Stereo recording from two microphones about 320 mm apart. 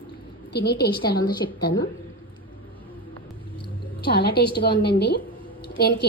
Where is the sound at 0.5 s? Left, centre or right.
Left.